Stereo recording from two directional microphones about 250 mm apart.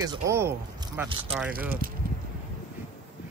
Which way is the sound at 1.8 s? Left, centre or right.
Right.